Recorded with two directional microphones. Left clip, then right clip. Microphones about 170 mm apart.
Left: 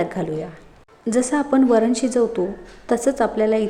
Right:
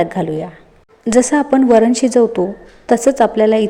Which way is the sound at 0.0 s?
25° right (ahead or behind).